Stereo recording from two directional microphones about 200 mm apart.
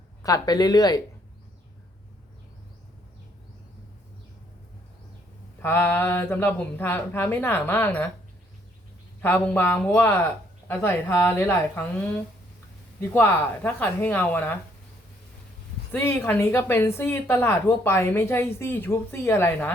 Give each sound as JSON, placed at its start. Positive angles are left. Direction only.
{"t": 0.2, "sound": "speech", "side_deg": 15}
{"t": 5.6, "sound": "speech", "side_deg": 10}
{"t": 9.2, "sound": "speech", "side_deg": 10}
{"t": 15.9, "sound": "speech", "side_deg": 10}